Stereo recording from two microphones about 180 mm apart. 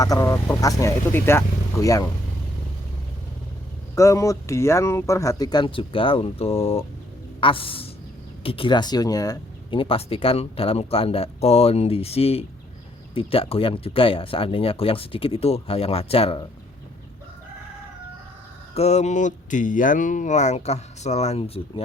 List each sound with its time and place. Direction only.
0.0 s speech: 20° left (ahead or behind)
3.9 s speech: 15° left (ahead or behind)
18.7 s speech: 35° left (ahead or behind)